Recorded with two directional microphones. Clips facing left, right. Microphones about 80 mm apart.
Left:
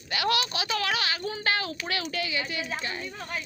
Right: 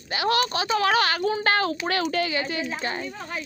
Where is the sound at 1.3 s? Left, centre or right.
Right.